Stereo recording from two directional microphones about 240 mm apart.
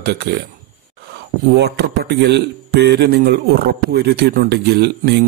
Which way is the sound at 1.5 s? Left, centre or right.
Right.